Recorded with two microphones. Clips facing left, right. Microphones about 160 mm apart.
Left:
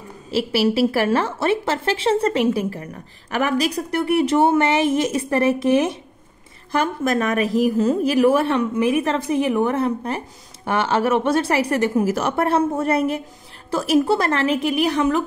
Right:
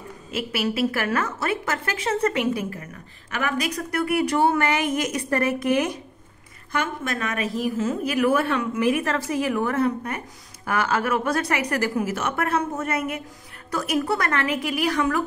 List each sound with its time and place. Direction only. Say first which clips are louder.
0.3 s a woman's voice: left 7 dB; 30° left (ahead or behind)
6.7 s a woman's voice: left 7 dB; 40° left (ahead or behind)
12.0 s a woman's voice: left 6 dB; 35° left (ahead or behind)